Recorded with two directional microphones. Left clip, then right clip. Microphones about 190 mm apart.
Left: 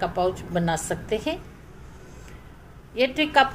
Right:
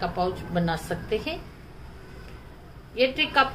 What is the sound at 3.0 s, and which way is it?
Speech, 35° left (ahead or behind).